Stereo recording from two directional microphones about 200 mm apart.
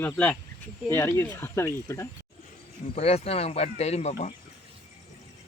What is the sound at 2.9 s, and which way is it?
Speech, 30° left (ahead or behind).